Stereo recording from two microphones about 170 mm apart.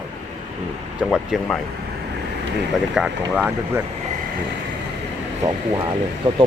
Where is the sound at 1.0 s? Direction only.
5° right (ahead or behind).